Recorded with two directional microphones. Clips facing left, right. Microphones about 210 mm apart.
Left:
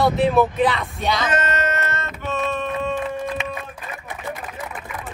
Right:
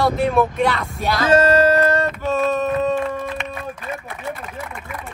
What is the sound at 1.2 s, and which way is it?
Music, 30° right (ahead or behind).